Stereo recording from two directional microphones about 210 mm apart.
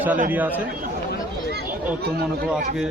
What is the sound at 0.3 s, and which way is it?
Speech, 10° right (ahead or behind).